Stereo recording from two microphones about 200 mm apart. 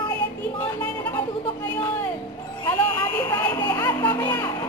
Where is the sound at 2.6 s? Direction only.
10° left (ahead or behind).